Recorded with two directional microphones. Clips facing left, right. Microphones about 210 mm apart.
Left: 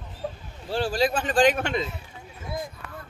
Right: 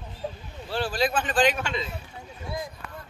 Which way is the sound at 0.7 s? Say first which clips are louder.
Left 2 dB; 40° left (ahead or behind).